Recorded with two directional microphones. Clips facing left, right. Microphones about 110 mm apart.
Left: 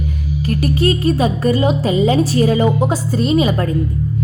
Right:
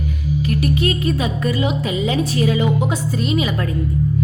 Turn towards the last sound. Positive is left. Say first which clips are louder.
# left 5 dB
turn(degrees=35)  # may be behind; listen again after turning